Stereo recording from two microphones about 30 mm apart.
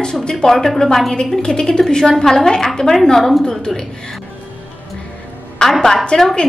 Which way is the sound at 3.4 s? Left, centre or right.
Left.